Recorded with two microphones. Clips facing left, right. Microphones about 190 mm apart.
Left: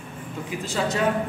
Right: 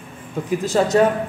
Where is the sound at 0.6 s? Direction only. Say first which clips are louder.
Right 9 dB; 45° right (ahead or behind).